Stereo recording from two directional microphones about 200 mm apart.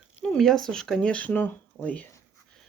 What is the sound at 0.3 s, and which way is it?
Speech, centre (ahead or behind).